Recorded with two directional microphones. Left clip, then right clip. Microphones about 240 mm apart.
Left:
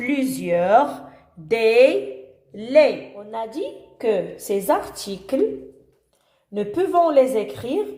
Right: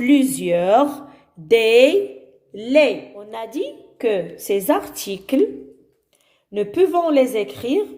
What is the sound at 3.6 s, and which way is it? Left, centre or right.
A woman's voice, right.